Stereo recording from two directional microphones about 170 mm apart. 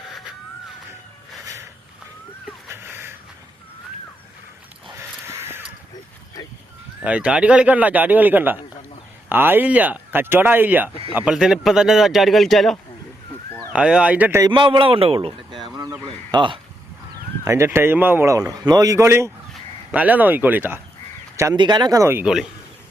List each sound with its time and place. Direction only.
2.6 s a sound: 15° right (ahead or behind)
4.9 s crow: 15° right (ahead or behind)
7.0 s speech: 5° right (ahead or behind)
14.4 s speech: 25° right (ahead or behind)
17.4 s speech: 15° right (ahead or behind)
21.3 s speech: 20° right (ahead or behind)